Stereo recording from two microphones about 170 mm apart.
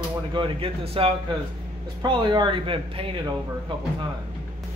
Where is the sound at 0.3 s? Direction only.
30° right (ahead or behind).